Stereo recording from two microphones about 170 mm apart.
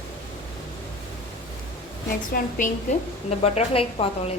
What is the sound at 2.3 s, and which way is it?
Speech, 55° left (ahead or behind).